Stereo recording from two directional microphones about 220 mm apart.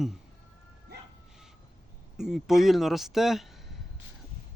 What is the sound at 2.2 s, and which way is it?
Speech, centre (ahead or behind).